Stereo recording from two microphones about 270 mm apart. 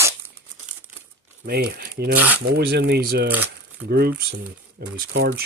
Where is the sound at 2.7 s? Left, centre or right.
Right.